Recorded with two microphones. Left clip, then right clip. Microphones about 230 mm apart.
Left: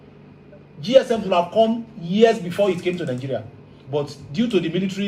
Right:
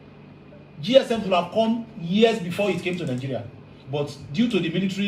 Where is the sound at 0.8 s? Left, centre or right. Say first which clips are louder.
Left 2 dB; left.